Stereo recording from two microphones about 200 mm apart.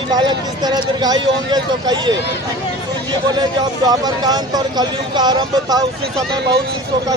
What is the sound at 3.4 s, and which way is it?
Speech, 20° right (ahead or behind).